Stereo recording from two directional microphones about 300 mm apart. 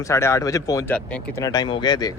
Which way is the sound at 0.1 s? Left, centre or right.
Centre.